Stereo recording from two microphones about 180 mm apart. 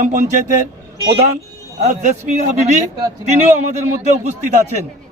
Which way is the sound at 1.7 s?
40° right (ahead or behind).